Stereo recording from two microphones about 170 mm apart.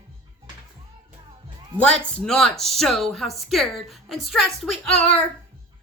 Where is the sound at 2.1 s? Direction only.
Centre (ahead or behind).